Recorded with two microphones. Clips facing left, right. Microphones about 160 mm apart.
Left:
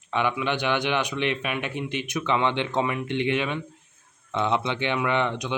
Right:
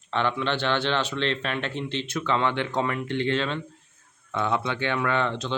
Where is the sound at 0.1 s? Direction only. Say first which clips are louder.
Even; 10° left (ahead or behind).